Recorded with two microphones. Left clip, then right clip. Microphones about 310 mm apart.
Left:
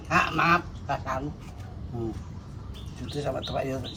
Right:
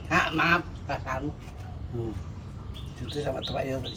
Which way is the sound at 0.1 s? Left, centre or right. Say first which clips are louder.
Left 1 dB; centre.